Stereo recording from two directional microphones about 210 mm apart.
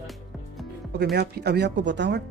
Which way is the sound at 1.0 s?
50° right (ahead or behind).